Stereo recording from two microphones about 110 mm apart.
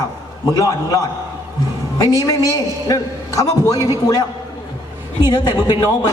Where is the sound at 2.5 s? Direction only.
35° left (ahead or behind).